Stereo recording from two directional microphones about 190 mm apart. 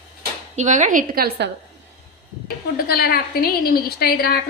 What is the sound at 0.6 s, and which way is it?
Speech, 40° right (ahead or behind).